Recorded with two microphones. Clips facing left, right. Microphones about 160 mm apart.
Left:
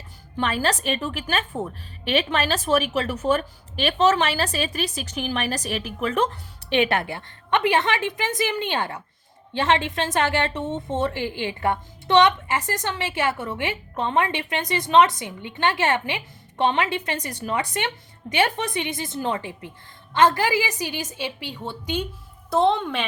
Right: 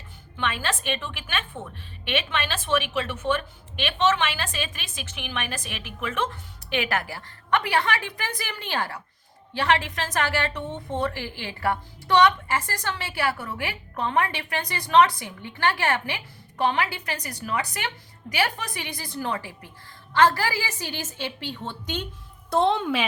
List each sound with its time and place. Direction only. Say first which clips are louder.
0.3 s a woman's voice: left 5 dB; 40° left (ahead or behind); by 22.0 s 10° left (ahead or behind)
22.4 s a woman's voice: left 2 dB; centre (ahead or behind)